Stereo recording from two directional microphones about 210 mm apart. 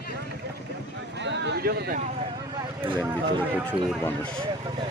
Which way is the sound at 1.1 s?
55° right (ahead or behind).